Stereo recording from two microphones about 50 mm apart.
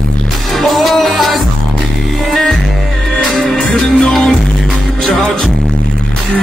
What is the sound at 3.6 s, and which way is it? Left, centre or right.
Music, centre.